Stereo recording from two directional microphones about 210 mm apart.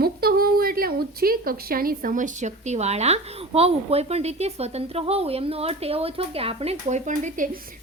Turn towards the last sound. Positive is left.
turn(degrees=-40)  # may be behind; listen again after turning